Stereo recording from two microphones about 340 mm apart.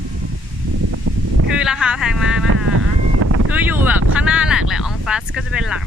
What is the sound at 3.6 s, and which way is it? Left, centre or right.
Speech, centre.